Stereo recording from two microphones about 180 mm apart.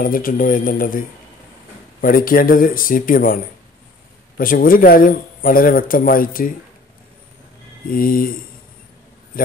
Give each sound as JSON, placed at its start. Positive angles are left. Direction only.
{"t": 0.0, "sound": "speech", "side_deg": 50}
{"t": 4.4, "sound": "speech", "side_deg": 50}
{"t": 7.9, "sound": "speech", "side_deg": 50}